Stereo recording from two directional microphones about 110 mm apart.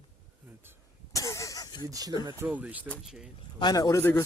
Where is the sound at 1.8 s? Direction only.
35° right (ahead or behind).